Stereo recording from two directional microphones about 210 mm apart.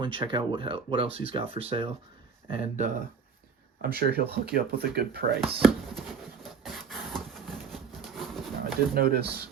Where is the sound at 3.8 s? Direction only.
50° right (ahead or behind).